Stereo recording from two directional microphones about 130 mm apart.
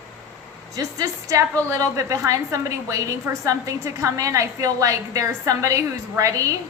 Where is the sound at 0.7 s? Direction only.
25° right (ahead or behind).